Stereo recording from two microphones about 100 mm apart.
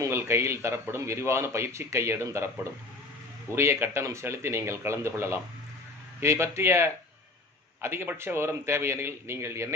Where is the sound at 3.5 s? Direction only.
25° right (ahead or behind).